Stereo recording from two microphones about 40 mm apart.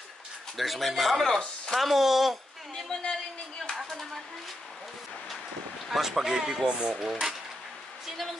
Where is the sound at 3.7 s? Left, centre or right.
Centre.